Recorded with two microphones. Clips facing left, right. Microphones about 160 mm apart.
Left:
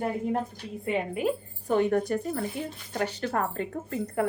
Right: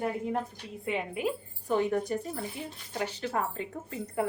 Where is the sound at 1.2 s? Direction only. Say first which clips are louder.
Left 4 dB; 60° left (ahead or behind).